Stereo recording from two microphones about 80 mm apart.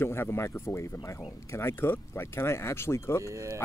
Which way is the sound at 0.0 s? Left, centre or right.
Left.